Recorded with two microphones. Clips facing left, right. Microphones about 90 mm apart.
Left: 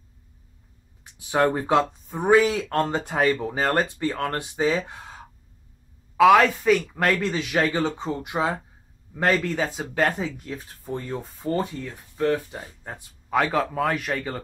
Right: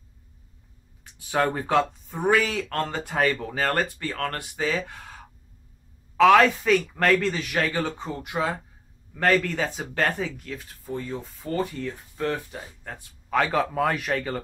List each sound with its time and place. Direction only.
1.1 s speech: 15° left (ahead or behind)
6.1 s speech: 5° left (ahead or behind); by 11.5 s 35° left (ahead or behind)
11.5 s speech: 15° left (ahead or behind)
13.4 s speech: centre (ahead or behind)